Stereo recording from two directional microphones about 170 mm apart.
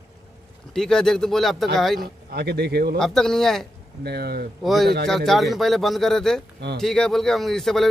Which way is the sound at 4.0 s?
70° right (ahead or behind).